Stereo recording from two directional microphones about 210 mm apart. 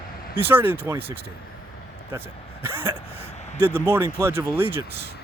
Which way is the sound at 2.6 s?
10° right (ahead or behind).